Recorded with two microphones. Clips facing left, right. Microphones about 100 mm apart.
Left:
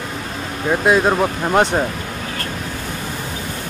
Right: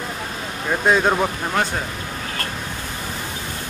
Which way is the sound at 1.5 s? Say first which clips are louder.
Left 7 dB; 20° left (ahead or behind).